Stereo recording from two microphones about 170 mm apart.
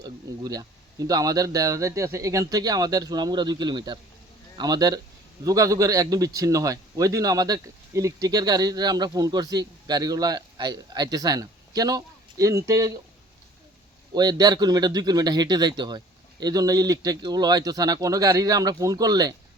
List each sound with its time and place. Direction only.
0.0 s a man's voice: 20° right (ahead or behind)
14.1 s a man's voice: 25° right (ahead or behind)